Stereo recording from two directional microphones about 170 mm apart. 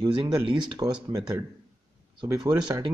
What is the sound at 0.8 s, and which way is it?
Speech, 20° right (ahead or behind).